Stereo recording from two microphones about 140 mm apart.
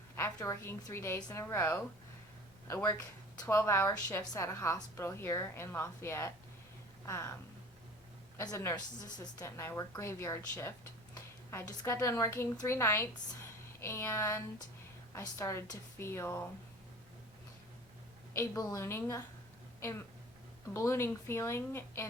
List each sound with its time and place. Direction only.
0.2 s a woman's voice: 20° left (ahead or behind)
8.4 s a woman's voice: 20° left (ahead or behind)
18.3 s a woman's voice: 25° left (ahead or behind)
20.7 s a woman's voice: 20° left (ahead or behind)